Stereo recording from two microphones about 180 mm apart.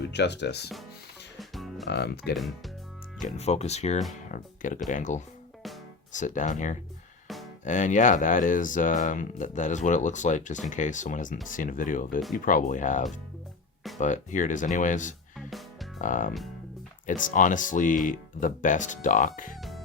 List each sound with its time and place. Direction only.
0.1 s speech: 70° left (ahead or behind)
1.4 s music: centre (ahead or behind)
1.9 s speech: 65° left (ahead or behind)
3.2 s speech: 40° left (ahead or behind)
15.4 s music: centre (ahead or behind)
16.0 s speech: 45° left (ahead or behind)